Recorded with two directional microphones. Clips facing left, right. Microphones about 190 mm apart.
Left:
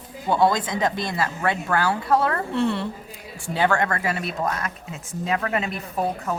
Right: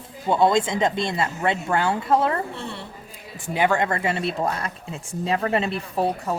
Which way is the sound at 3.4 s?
15° right (ahead or behind).